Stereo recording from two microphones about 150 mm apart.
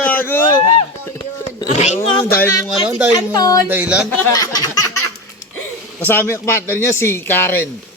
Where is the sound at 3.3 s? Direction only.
25° left (ahead or behind).